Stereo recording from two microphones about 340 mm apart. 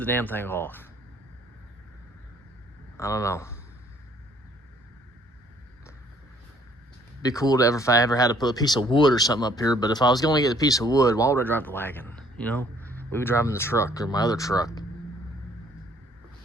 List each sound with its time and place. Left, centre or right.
0.0 s speech: centre
3.0 s speech: centre
7.2 s speech: centre